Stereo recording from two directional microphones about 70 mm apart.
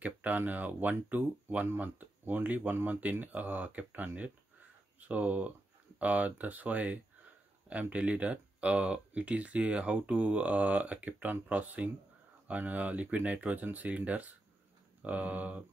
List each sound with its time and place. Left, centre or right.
0.0 s speech: right